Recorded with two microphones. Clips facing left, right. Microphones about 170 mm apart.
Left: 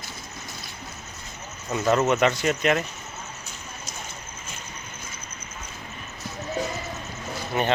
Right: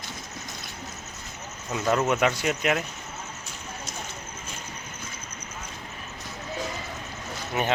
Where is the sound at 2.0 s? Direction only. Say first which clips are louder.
Left 2 dB; 10° right (ahead or behind).